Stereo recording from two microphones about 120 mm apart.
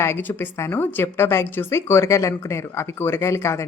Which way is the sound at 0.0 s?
20° left (ahead or behind).